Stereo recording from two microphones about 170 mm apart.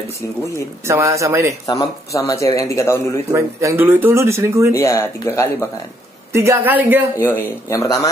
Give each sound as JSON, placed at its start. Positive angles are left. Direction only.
{"t": 0.5, "sound": "speech", "side_deg": -15}
{"t": 1.7, "sound": "speech", "side_deg": 20}
{"t": 3.3, "sound": "speech", "side_deg": -15}
{"t": 4.7, "sound": "speech", "side_deg": 15}
{"t": 6.3, "sound": "speech", "side_deg": -15}
{"t": 7.2, "sound": "speech", "side_deg": 15}